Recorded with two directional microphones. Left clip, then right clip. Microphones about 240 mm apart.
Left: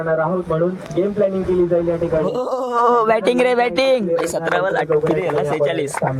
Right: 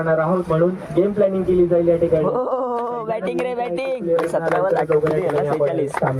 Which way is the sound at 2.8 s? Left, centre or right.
Left.